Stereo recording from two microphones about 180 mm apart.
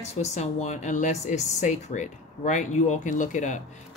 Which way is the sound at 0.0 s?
35° left (ahead or behind).